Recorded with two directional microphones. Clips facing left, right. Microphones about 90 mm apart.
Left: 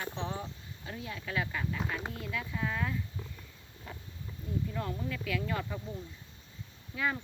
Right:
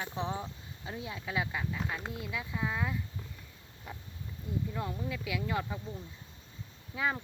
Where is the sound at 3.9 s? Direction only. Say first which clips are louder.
Right 1 dB; 15° right (ahead or behind).